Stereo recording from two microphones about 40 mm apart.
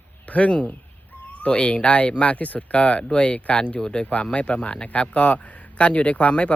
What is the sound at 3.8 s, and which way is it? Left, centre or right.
Speech, centre.